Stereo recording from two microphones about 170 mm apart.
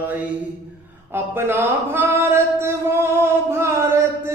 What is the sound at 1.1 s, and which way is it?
Speech, 15° right (ahead or behind).